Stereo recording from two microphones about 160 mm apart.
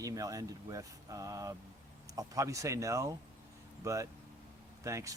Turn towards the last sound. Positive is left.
turn(degrees=-20)  # may be behind; listen again after turning